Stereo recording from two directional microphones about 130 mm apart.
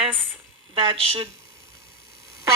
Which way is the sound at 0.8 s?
45° right (ahead or behind).